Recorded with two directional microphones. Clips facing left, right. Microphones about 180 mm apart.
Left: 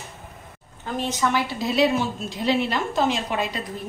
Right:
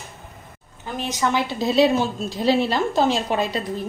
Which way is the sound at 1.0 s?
25° right (ahead or behind).